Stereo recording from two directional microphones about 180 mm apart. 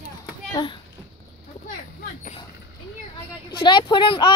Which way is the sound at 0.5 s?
25° left (ahead or behind).